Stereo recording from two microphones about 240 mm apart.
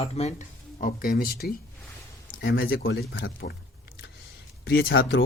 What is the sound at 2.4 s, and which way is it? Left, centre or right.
Speech, left.